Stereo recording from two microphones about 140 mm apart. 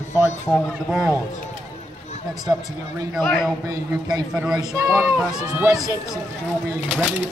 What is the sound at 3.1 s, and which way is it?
Speech, centre (ahead or behind).